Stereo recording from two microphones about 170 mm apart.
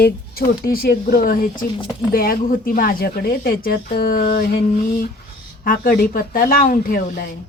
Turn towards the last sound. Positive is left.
turn(degrees=60)  # may be behind; listen again after turning